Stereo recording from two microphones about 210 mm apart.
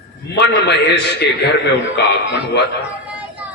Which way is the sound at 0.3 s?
55° left (ahead or behind).